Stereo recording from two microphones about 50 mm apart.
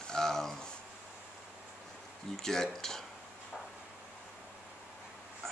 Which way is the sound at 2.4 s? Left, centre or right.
Centre.